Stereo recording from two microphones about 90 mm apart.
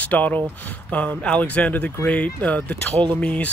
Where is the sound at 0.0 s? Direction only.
15° left (ahead or behind).